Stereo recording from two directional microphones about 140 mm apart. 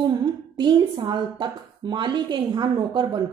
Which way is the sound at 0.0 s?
30° right (ahead or behind).